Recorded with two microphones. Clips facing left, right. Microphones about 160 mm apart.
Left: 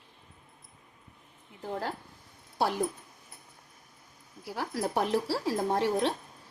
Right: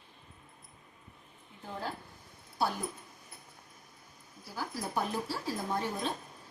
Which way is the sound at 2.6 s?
90° left.